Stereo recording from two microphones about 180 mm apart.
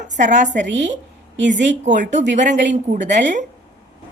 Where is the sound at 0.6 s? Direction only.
85° right.